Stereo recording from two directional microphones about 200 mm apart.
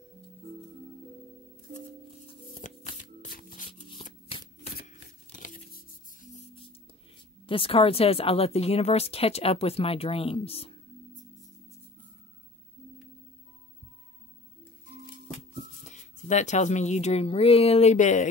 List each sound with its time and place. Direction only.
2.2 s shuffling cards: 35° left (ahead or behind)
4.0 s shuffling cards: 30° left (ahead or behind)
4.7 s a sound: 45° left (ahead or behind)
6.3 s music: 25° left (ahead or behind)
7.4 s speech: 25° left (ahead or behind)
15.8 s speech: 35° left (ahead or behind)